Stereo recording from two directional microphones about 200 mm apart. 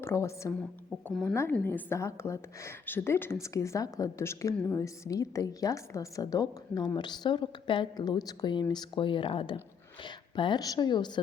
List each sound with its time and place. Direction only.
0.0 s a woman's voice: 15° left (ahead or behind)
1.0 s a woman's voice: centre (ahead or behind)
1.3 s a woman's voice: 10° left (ahead or behind)